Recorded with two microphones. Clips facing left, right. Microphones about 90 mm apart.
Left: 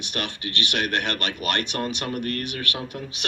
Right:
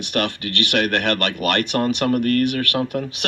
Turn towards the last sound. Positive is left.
turn(degrees=-50)  # may be behind; listen again after turning